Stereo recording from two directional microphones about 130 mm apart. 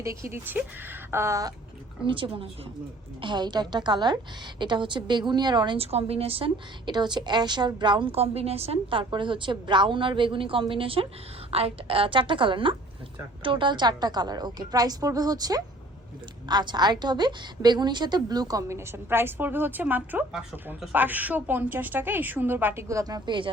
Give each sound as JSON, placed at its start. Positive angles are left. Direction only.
{"t": 0.0, "sound": "a woman's voice", "side_deg": -20}
{"t": 2.0, "sound": "a woman's voice", "side_deg": -40}
{"t": 5.8, "sound": "a woman's voice", "side_deg": -50}